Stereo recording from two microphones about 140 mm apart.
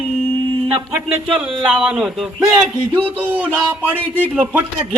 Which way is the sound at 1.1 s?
10° right (ahead or behind).